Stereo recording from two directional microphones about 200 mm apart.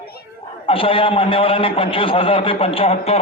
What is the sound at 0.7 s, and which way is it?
A man's voice, 30° left (ahead or behind).